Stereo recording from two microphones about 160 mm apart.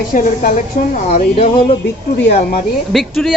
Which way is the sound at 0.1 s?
55° left (ahead or behind).